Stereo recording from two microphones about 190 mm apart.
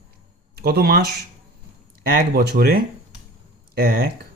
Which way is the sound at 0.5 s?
55° right (ahead or behind).